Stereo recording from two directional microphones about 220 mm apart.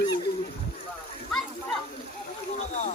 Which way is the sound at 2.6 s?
30° left (ahead or behind).